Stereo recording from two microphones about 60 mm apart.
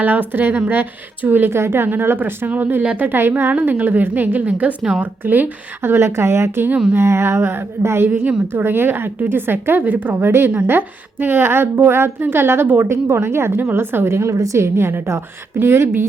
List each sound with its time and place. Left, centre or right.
0.0 s a woman's voice: right
3.1 s a woman's voice: right
3.5 s a woman's voice: right